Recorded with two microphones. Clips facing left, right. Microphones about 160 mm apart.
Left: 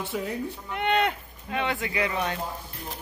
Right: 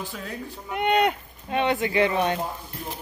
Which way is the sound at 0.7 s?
15° right (ahead or behind).